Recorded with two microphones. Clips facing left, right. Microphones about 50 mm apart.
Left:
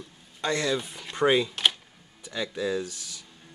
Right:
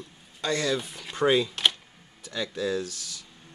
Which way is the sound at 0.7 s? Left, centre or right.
Centre.